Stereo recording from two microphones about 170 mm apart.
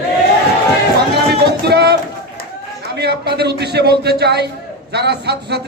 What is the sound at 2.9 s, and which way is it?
A man's voice, 75° right (ahead or behind).